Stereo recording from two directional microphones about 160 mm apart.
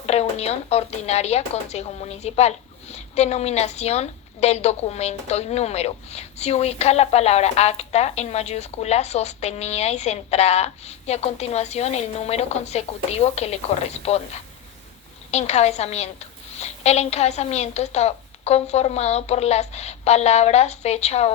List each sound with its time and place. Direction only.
0.0 s a woman's voice: 40° left (ahead or behind)
15.3 s a woman's voice: 40° left (ahead or behind)